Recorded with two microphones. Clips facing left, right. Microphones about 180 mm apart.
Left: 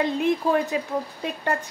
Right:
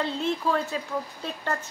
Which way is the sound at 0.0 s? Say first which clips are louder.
Left 5 dB; 15° left (ahead or behind).